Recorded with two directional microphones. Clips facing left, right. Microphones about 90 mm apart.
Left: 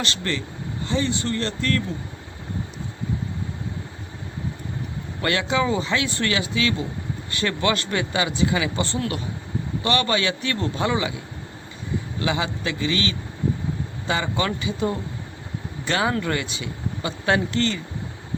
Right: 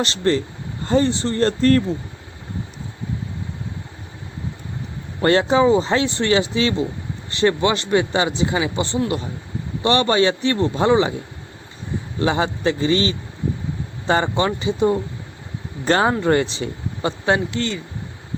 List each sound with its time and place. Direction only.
0.0 s speech: 35° right (ahead or behind)
1.1 s speech: 30° right (ahead or behind)
5.2 s a man's voice: 35° right (ahead or behind)
8.8 s a man's voice: 20° right (ahead or behind)
12.2 s speech: 35° right (ahead or behind)
14.4 s a man's voice: 25° right (ahead or behind)
17.5 s speech: 10° right (ahead or behind)